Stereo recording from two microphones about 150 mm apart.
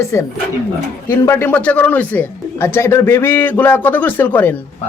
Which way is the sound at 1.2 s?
15° left (ahead or behind).